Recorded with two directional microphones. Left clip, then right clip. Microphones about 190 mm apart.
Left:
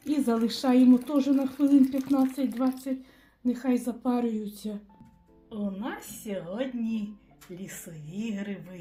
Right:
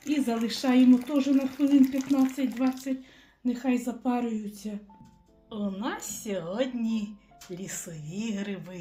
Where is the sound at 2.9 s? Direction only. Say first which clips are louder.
Even; 25° left (ahead or behind).